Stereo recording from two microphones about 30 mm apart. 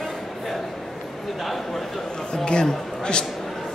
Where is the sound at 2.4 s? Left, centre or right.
Left.